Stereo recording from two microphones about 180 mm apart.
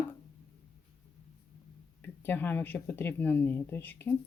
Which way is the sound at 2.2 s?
10° left (ahead or behind).